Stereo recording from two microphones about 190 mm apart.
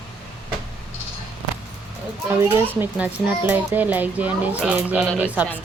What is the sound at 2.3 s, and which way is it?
A child's voice, 10° right (ahead or behind).